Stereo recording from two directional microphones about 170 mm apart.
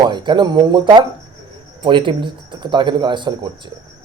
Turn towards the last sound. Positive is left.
turn(degrees=-25)  # may be behind; listen again after turning